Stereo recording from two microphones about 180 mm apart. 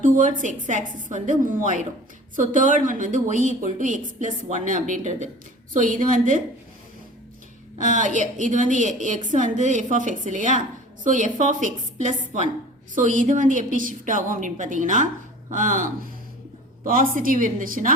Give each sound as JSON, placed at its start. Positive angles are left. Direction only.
{"t": 0.0, "sound": "a woman's voice", "side_deg": -45}
{"t": 7.8, "sound": "a woman's voice", "side_deg": -45}